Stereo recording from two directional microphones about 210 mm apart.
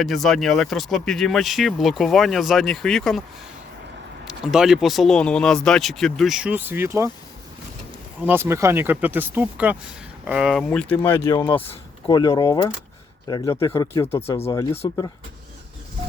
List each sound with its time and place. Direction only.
0.0 s speech: centre (ahead or behind)
4.3 s speech: centre (ahead or behind)
8.2 s speech: 10° right (ahead or behind); by 11.6 s 10° left (ahead or behind)
11.6 s speech: 25° left (ahead or behind)